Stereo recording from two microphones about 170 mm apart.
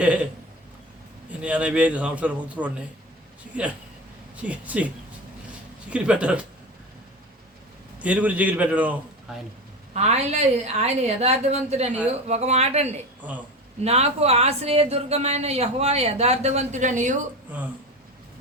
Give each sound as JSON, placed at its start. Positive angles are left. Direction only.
{"t": 0.0, "sound": "a man's voice", "side_deg": -5}
{"t": 1.3, "sound": "a man's voice", "side_deg": -5}
{"t": 4.4, "sound": "a man's voice", "side_deg": -10}
{"t": 5.9, "sound": "a man's voice", "side_deg": -5}
{"t": 7.9, "sound": "a man's voice", "side_deg": -10}
{"t": 9.9, "sound": "speech", "side_deg": -40}
{"t": 13.2, "sound": "a man's voice", "side_deg": -10}
{"t": 13.8, "sound": "speech", "side_deg": -40}